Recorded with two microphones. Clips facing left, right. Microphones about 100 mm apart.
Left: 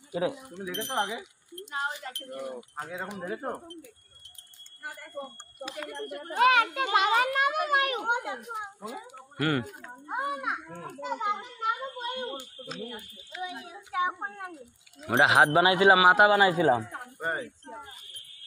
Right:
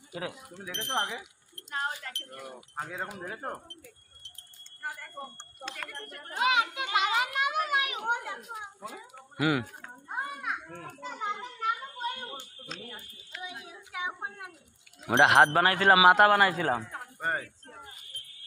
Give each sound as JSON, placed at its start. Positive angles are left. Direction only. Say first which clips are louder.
{"t": 0.1, "sound": "a child's voice", "louder": "left 8 dB", "side_deg": 20}
{"t": 5.1, "sound": "speech", "louder": "left 3 dB", "side_deg": 10}
{"t": 6.3, "sound": "a child's voice", "louder": "left 5 dB", "side_deg": 55}
{"t": 8.0, "sound": "a child's voice", "louder": "left 2 dB", "side_deg": 20}
{"t": 9.4, "sound": "speech", "louder": "even", "side_deg": -5}
{"t": 10.0, "sound": "a child's voice", "louder": "left 5 dB", "side_deg": 25}
{"t": 11.1, "sound": "a sound", "louder": "left 4 dB", "side_deg": 25}
{"t": 12.4, "sound": "speech", "louder": "left 5 dB", "side_deg": 5}
{"t": 13.4, "sound": "a child's voice", "louder": "left 6 dB", "side_deg": 35}
{"t": 15.0, "sound": "a man's voice", "louder": "right 1 dB", "side_deg": 0}
{"t": 15.9, "sound": "a man's voice", "louder": "right 2 dB", "side_deg": 5}
{"t": 16.5, "sound": "speech", "louder": "left 6 dB", "side_deg": 15}